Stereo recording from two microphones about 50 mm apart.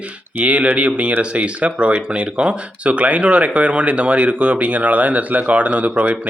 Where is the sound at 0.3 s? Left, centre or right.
Right.